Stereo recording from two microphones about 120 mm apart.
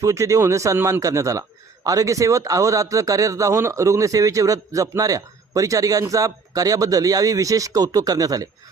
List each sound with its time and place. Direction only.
0.0 s a man's voice: 25° right (ahead or behind)